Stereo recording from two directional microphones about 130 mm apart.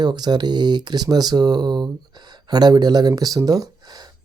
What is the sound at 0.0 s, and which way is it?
Speech, 35° right (ahead or behind).